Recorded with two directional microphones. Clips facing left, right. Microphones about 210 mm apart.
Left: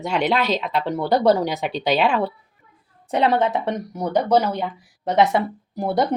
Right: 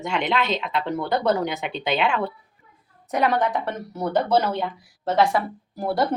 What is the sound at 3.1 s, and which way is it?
Speech, 25° left (ahead or behind).